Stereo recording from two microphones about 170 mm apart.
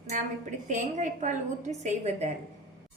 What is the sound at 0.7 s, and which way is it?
A woman's voice, 45° right (ahead or behind).